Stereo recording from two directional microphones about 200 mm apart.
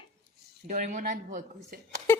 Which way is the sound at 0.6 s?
40° right (ahead or behind).